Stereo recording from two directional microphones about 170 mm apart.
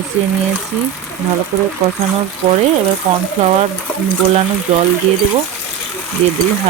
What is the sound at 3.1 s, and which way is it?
Speech, 35° right (ahead or behind).